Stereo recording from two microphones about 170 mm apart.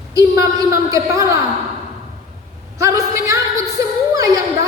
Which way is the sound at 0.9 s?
20° right (ahead or behind).